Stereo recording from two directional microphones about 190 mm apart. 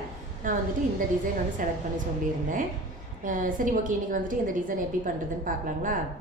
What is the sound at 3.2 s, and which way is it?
A woman's voice, 45° right (ahead or behind).